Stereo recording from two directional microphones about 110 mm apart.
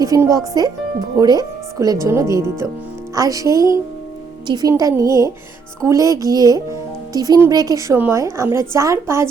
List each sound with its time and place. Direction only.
0.0 s speech: 30° right (ahead or behind)